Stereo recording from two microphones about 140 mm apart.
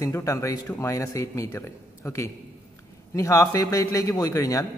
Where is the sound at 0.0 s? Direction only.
20° left (ahead or behind).